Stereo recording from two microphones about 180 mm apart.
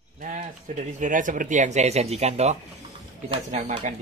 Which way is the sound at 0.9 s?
45° right (ahead or behind).